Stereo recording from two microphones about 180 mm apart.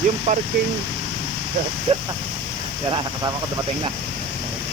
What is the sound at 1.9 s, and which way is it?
Speech, 30° right (ahead or behind).